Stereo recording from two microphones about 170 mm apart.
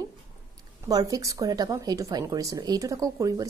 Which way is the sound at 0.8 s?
20° right (ahead or behind).